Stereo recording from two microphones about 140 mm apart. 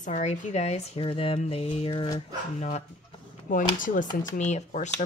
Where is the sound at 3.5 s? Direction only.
70° left (ahead or behind).